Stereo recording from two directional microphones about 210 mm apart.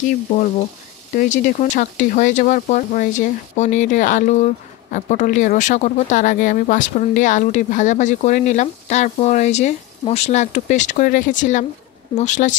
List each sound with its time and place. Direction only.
1.1 s speech: 40° left (ahead or behind)